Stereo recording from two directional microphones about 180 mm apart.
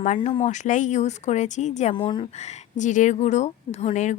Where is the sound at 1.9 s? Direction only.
25° left (ahead or behind).